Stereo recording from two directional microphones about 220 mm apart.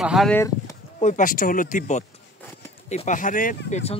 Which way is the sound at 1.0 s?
35° left (ahead or behind).